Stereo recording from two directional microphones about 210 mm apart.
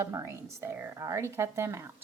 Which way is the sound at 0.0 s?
10° right (ahead or behind).